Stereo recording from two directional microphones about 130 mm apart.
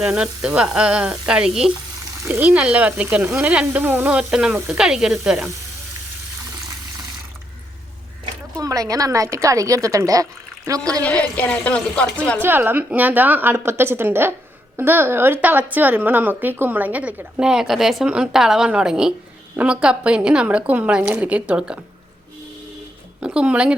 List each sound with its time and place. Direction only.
0.0 s a woman's voice: 5° right (ahead or behind)
1.3 s frying: 5° right (ahead or behind)
2.2 s a woman's voice: 15° right (ahead or behind)
8.5 s a woman's voice: 25° right (ahead or behind)
11.0 s speech: 10° left (ahead or behind)
12.4 s a woman's voice: 15° right (ahead or behind)
23.2 s a woman's voice: 10° right (ahead or behind)